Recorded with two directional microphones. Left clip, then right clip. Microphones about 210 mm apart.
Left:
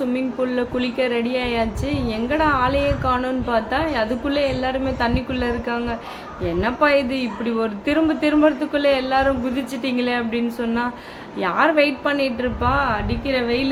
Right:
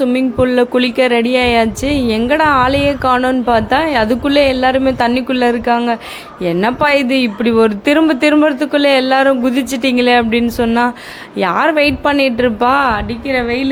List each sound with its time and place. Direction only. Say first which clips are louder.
0.0 s speech: right 9 dB; 45° right (ahead or behind)
13.2 s a woman's voice: right 5 dB; 30° right (ahead or behind)